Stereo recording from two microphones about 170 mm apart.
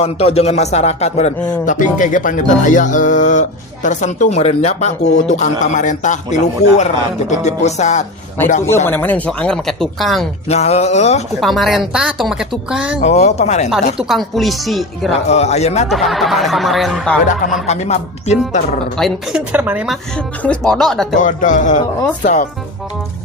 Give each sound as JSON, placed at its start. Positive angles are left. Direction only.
{"t": 0.0, "sound": "a man's voice", "side_deg": 35}
{"t": 8.6, "sound": "speech", "side_deg": 15}
{"t": 10.5, "sound": "speech", "side_deg": 40}
{"t": 11.3, "sound": "speech", "side_deg": 0}
{"t": 13.1, "sound": "speech", "side_deg": 40}
{"t": 14.0, "sound": "speech", "side_deg": 0}
{"t": 15.3, "sound": "speech", "side_deg": 40}
{"t": 15.9, "sound": "speech", "side_deg": 0}
{"t": 17.7, "sound": "speech", "side_deg": 40}
{"t": 18.9, "sound": "a woman's voice", "side_deg": 0}
{"t": 20.4, "sound": "speech", "side_deg": 5}
{"t": 21.2, "sound": "a man's voice", "side_deg": 50}